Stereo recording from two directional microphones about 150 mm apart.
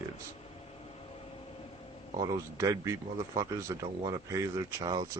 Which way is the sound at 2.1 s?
25° right (ahead or behind).